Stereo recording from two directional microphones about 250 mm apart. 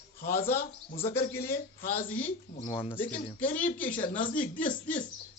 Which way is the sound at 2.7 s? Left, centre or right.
Left.